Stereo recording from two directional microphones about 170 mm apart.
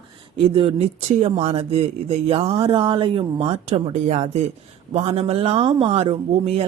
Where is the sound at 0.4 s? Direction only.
35° right (ahead or behind).